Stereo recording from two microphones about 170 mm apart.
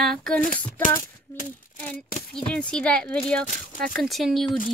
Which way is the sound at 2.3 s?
5° left (ahead or behind).